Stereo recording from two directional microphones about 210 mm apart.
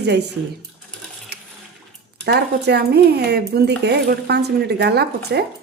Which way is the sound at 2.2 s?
50° right (ahead or behind).